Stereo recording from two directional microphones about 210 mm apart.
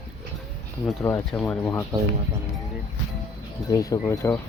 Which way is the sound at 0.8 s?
10° left (ahead or behind).